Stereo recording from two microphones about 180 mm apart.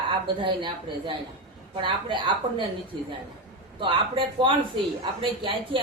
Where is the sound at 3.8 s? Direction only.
30° right (ahead or behind).